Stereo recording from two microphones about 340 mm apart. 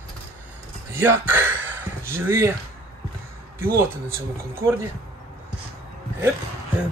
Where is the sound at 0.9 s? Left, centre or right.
Centre.